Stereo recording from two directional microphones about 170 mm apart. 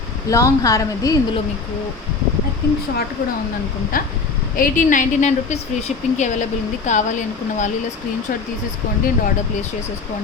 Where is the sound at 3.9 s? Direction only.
55° left (ahead or behind).